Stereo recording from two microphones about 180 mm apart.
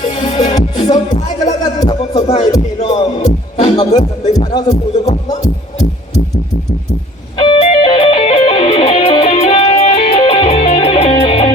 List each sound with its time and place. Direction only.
0.0 s music: 30° left (ahead or behind)
1.1 s music: 45° left (ahead or behind)
1.5 s music: 20° left (ahead or behind)
3.2 s music: 40° left (ahead or behind)
3.8 s speech: 20° left (ahead or behind)
4.7 s music: 40° left (ahead or behind)
7.3 s music: 30° left (ahead or behind)